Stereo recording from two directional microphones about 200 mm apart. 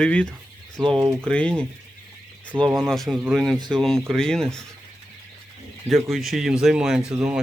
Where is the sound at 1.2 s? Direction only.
5° left (ahead or behind).